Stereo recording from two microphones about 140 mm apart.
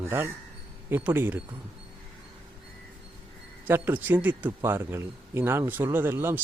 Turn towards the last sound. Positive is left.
turn(degrees=-15)  # may be behind; listen again after turning